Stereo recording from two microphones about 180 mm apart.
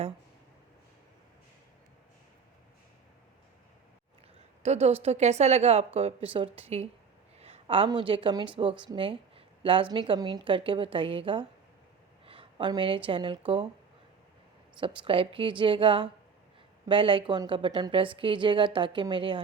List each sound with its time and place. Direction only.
4.6 s a woman's voice: 35° right (ahead or behind)
14.8 s a woman's voice: 30° right (ahead or behind)